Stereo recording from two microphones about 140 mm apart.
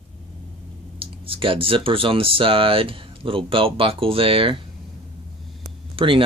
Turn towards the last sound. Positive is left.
turn(degrees=-40)  # may be behind; listen again after turning